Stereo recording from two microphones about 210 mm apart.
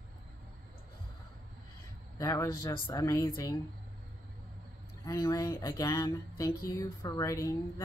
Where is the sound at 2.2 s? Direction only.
15° left (ahead or behind).